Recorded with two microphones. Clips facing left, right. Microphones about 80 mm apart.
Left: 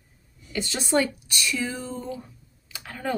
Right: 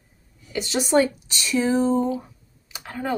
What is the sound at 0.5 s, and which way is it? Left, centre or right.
Speech, right.